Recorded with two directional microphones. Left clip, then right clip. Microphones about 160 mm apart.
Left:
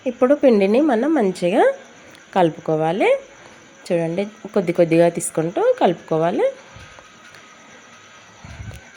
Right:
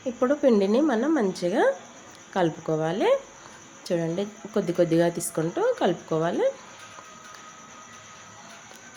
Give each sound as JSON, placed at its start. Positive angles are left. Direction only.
{"t": 0.2, "sound": "a woman's voice", "side_deg": 25}